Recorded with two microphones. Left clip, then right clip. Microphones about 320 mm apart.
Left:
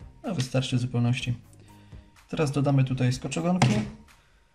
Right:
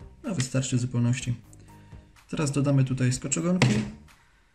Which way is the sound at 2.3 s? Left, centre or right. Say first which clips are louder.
Left 1 dB; centre.